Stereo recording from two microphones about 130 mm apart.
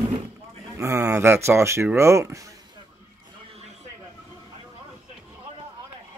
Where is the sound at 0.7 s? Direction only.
25° right (ahead or behind).